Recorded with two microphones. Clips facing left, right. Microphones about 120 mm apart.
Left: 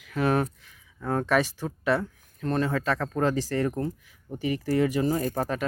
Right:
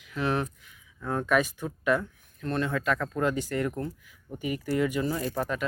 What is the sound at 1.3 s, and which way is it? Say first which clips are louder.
Speech: right 1 dB; 30° left (ahead or behind).